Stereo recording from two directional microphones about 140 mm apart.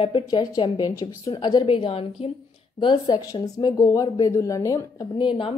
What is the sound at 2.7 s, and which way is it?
Speech, 30° left (ahead or behind).